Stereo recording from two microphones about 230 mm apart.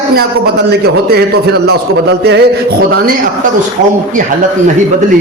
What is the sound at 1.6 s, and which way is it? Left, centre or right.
A man's voice, right.